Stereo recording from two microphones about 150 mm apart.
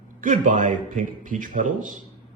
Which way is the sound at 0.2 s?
60° right (ahead or behind).